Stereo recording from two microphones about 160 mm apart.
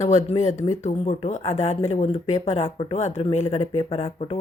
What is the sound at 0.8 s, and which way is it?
Speech, 35° left (ahead or behind).